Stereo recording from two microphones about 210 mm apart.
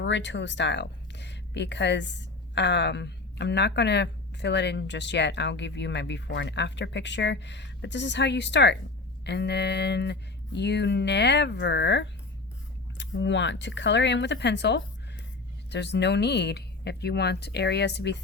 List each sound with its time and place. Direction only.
0.0 s speech: 60° left (ahead or behind)